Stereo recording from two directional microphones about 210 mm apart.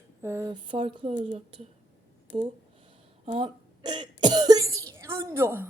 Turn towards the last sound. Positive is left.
turn(degrees=-10)  # may be behind; listen again after turning